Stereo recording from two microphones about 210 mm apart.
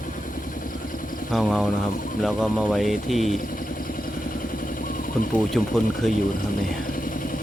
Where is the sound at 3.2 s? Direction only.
40° left (ahead or behind).